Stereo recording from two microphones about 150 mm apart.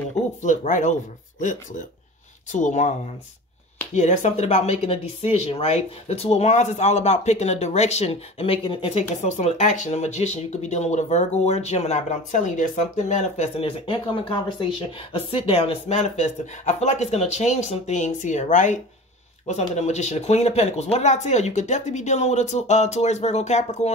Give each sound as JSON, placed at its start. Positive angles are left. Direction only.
{"t": 0.4, "sound": "speech", "side_deg": 55}